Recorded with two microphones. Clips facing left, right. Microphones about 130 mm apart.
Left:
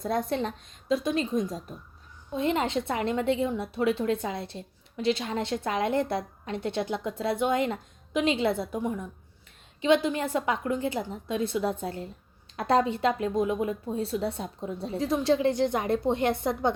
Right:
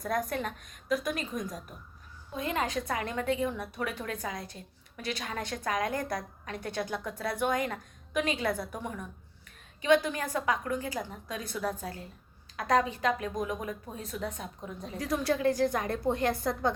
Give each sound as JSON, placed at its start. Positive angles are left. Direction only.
{"t": 0.0, "sound": "a woman's voice", "side_deg": 25}